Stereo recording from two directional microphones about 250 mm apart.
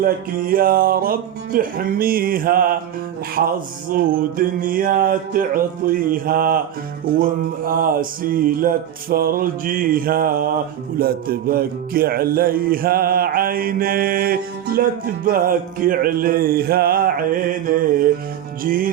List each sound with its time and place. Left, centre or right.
0.0 s music: right